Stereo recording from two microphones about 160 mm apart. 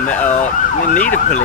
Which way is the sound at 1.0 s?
50° left (ahead or behind).